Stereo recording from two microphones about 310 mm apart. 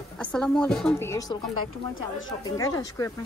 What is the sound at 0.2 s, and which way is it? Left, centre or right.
A woman's voice, centre.